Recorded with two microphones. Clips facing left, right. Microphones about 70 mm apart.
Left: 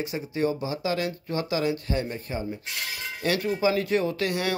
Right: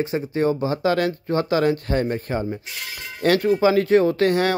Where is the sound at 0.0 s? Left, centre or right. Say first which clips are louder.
Right 6 dB; right.